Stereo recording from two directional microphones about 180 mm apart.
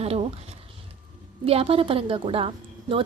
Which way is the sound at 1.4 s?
30° right (ahead or behind).